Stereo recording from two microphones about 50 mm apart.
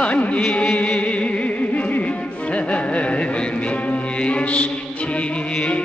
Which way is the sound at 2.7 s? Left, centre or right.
Left.